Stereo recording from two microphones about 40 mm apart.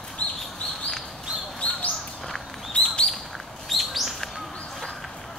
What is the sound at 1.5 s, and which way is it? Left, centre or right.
Bird, left.